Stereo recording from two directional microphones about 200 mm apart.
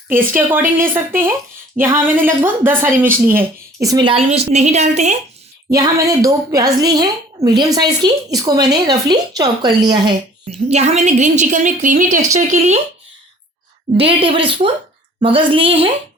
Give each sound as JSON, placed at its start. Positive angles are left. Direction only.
{"t": 0.1, "sound": "a woman's voice", "side_deg": -10}
{"t": 5.7, "sound": "a woman's voice", "side_deg": -15}
{"t": 10.7, "sound": "a woman's voice", "side_deg": -35}
{"t": 13.9, "sound": "a woman's voice", "side_deg": -25}